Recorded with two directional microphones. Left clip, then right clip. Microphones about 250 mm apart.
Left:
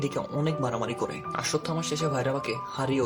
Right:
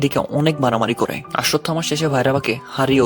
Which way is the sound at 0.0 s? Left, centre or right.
Right.